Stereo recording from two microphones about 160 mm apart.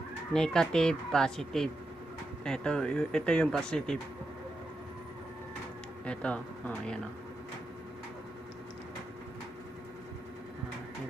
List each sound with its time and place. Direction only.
0.3 s speech: 5° left (ahead or behind)
6.1 s speech: 5° left (ahead or behind)